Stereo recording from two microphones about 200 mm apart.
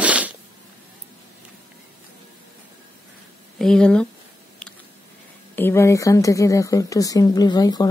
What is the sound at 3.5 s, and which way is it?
Speech, 5° left (ahead or behind).